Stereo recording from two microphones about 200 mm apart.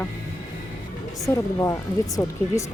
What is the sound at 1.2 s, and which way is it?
Speech, 15° left (ahead or behind).